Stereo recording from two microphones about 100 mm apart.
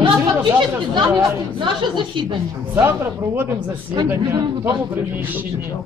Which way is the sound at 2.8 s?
20° right (ahead or behind).